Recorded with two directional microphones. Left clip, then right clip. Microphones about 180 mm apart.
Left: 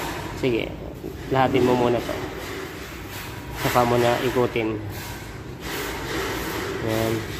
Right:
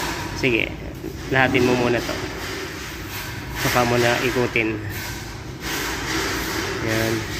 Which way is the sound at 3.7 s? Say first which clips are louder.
Even; centre (ahead or behind).